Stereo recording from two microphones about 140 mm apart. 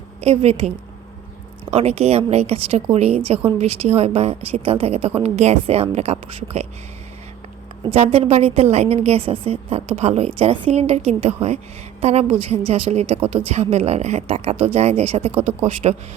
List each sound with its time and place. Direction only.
0.2 s a woman's voice: 50° right (ahead or behind)
1.7 s a woman's voice: 50° right (ahead or behind)
7.9 s a woman's voice: 45° right (ahead or behind)